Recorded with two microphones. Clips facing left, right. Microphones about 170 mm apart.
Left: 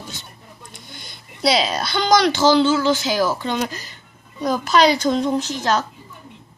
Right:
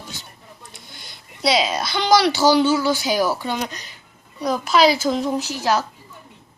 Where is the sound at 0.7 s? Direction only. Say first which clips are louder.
Left 3 dB; 5° right (ahead or behind).